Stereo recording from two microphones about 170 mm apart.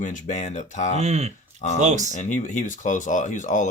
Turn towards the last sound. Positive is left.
turn(degrees=50)  # may be behind; listen again after turning